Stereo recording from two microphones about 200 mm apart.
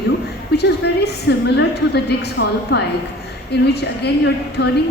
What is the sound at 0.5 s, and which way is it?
A woman's voice, 55° left (ahead or behind).